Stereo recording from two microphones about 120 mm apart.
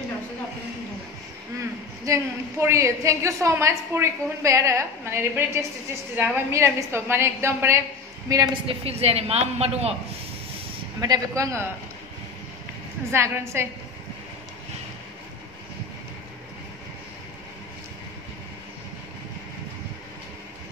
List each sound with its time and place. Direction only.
1.6 s a woman's voice: 25° right (ahead or behind)
8.6 s a woman's voice: 55° right (ahead or behind)
11.0 s a woman's voice: 30° right (ahead or behind)
13.1 s a woman's voice: 20° right (ahead or behind)